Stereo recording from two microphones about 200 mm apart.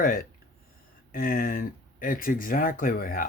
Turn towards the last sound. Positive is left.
turn(degrees=45)  # may be behind; listen again after turning